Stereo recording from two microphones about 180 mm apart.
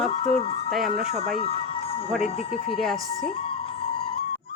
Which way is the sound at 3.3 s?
30° left (ahead or behind).